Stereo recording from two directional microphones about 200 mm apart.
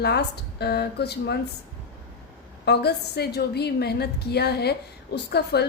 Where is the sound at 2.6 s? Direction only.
55° left (ahead or behind).